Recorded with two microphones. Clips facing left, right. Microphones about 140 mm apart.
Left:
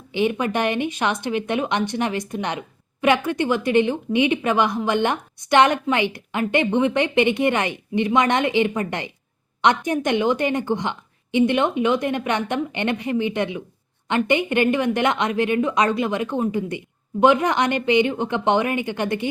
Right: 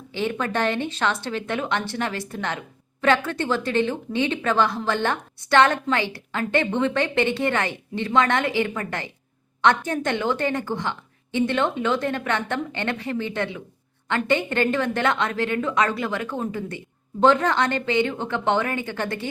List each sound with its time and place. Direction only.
0.1 s speech: 15° left (ahead or behind)